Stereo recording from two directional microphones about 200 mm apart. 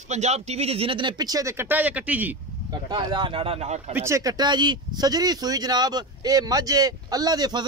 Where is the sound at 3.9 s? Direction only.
15° right (ahead or behind).